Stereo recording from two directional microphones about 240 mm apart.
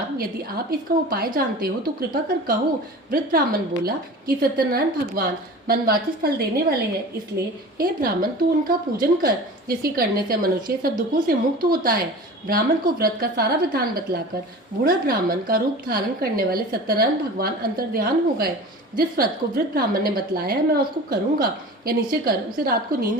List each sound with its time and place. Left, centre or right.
0.2 s a woman's voice: right
7.8 s a woman's voice: right
21.8 s a woman's voice: right